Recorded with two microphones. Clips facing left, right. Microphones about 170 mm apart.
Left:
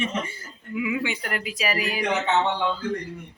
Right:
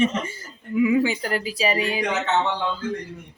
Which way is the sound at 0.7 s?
35° right (ahead or behind).